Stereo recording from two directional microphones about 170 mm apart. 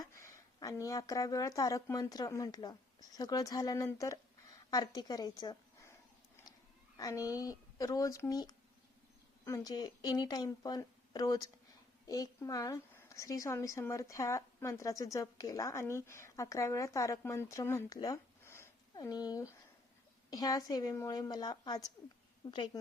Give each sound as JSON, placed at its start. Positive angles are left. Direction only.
{"t": 0.0, "sound": "a woman's voice", "side_deg": 15}
{"t": 6.9, "sound": "a woman's voice", "side_deg": 20}